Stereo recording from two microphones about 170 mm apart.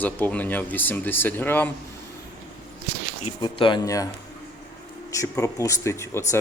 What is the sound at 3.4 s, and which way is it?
Speech, 25° left (ahead or behind).